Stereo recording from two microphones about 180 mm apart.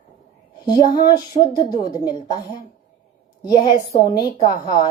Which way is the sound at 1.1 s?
25° left (ahead or behind).